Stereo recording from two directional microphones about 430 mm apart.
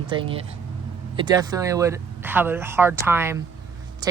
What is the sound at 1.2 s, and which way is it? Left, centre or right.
Speech, centre.